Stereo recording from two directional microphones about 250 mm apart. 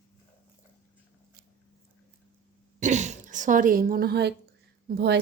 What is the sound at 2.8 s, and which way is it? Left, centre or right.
Throat clearing, right.